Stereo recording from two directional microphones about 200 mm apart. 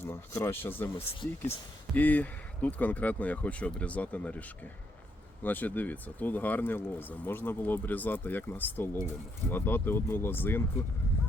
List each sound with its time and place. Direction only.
0.0 s speech: 10° left (ahead or behind)
0.9 s speech: 30° left (ahead or behind)
2.0 s speech: 10° left (ahead or behind)